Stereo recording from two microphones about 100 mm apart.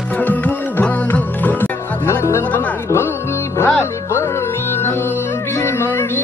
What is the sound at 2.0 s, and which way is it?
Music, 30° left (ahead or behind).